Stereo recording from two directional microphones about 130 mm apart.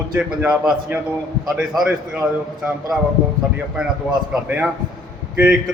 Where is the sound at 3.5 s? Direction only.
5° right (ahead or behind).